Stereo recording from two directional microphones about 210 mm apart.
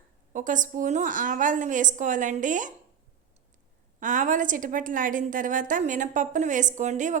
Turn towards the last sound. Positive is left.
turn(degrees=-35)  # may be behind; listen again after turning